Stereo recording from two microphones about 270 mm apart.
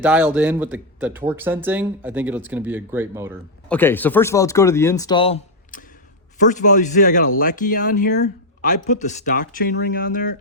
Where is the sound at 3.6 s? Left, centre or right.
Centre.